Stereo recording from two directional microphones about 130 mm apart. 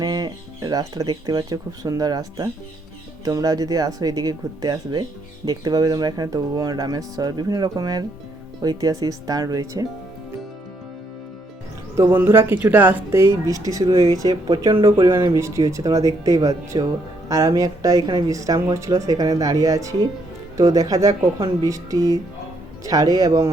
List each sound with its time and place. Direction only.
0.0 s speech: 30° right (ahead or behind)
11.9 s speech: 20° right (ahead or behind)